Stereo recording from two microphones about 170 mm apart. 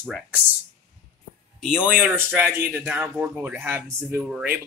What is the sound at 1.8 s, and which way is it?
A man's voice, 5° right (ahead or behind).